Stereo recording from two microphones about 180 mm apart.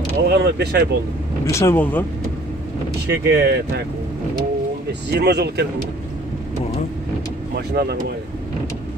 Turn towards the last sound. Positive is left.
turn(degrees=-65)  # may be behind; listen again after turning